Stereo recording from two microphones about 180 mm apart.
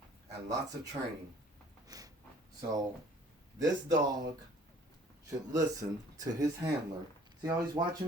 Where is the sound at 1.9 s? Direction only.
20° right (ahead or behind).